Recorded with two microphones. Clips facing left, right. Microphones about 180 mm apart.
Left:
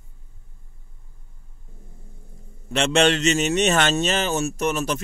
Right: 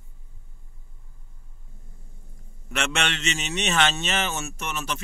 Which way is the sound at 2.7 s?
30° left (ahead or behind).